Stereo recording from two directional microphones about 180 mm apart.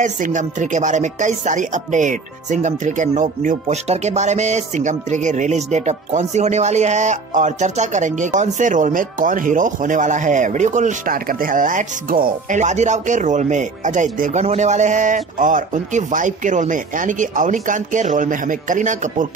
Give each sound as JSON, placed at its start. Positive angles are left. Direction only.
{"t": 0.0, "sound": "speech", "side_deg": -45}